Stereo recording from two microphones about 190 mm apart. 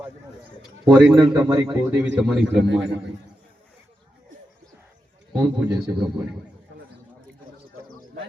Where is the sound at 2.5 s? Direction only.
70° right (ahead or behind).